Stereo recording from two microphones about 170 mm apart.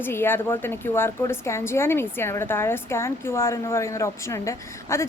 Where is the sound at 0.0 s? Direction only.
15° left (ahead or behind).